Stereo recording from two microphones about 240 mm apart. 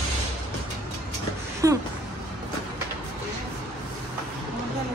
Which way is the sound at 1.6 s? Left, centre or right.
Centre.